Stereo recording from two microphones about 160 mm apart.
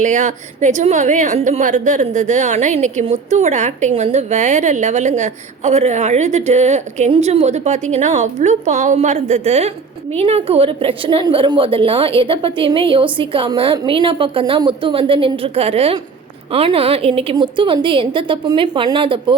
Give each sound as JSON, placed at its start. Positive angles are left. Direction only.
{"t": 0.0, "sound": "a woman's voice", "side_deg": -50}